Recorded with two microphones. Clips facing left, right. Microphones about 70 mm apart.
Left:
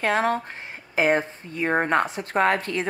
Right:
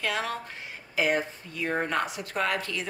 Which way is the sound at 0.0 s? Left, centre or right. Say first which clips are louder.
Left 8 dB; left.